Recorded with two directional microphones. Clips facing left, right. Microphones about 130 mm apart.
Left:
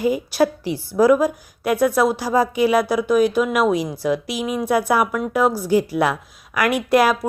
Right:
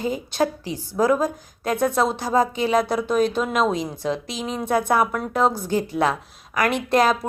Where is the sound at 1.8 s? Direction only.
20° right (ahead or behind).